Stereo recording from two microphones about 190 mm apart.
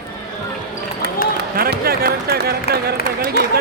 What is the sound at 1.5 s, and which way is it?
Basketball bounce, 50° right (ahead or behind).